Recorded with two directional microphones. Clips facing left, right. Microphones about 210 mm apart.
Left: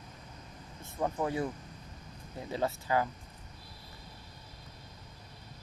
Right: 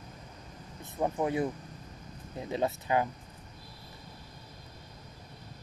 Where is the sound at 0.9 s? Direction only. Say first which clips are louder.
Right 3 dB; 20° right (ahead or behind).